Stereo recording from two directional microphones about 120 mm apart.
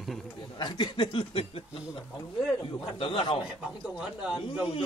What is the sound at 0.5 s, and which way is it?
Speech, 40° left (ahead or behind).